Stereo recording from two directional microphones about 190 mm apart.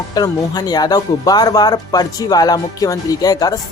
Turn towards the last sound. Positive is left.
turn(degrees=20)  # may be behind; listen again after turning